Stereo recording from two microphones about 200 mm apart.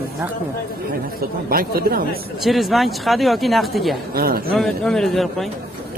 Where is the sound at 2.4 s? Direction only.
Centre (ahead or behind).